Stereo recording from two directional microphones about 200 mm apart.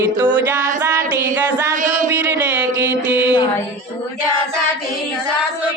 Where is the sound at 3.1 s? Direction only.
10° right (ahead or behind).